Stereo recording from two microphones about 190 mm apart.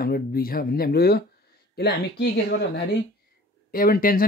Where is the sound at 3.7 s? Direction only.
50° left (ahead or behind).